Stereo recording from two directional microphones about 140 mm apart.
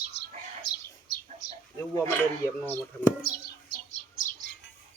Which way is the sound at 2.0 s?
20° left (ahead or behind).